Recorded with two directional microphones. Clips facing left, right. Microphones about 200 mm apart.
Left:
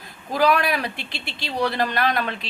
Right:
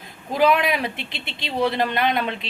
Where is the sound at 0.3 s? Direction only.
20° right (ahead or behind).